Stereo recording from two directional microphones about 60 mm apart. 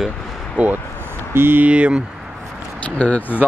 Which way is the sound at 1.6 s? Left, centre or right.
Centre.